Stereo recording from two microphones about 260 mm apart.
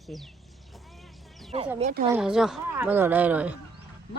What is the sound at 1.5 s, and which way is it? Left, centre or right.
Speech, right.